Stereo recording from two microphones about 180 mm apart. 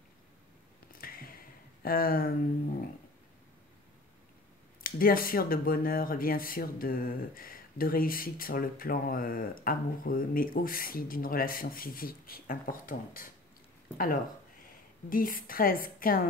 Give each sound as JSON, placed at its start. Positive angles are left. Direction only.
{"t": 1.0, "sound": "a sound", "side_deg": 55}
{"t": 1.8, "sound": "speech", "side_deg": 55}
{"t": 4.8, "sound": "speech", "side_deg": 55}
{"t": 15.0, "sound": "speech", "side_deg": 50}